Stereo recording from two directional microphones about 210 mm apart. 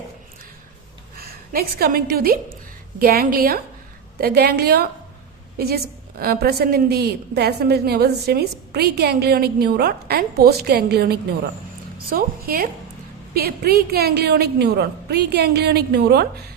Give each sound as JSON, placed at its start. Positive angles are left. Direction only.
{"t": 1.1, "sound": "a woman's voice", "side_deg": -45}